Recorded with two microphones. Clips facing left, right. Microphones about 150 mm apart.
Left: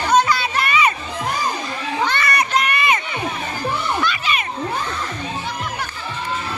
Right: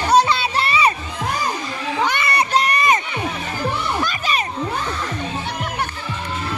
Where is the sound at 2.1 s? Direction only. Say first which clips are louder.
Right 1 dB; 25° right (ahead or behind).